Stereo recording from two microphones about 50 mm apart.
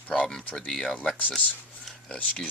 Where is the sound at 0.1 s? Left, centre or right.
Centre.